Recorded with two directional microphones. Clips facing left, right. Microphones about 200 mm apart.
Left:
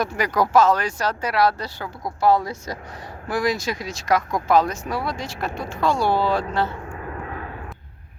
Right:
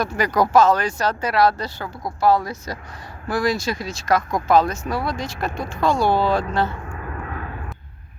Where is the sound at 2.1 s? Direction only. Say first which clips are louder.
Even; 20° left (ahead or behind).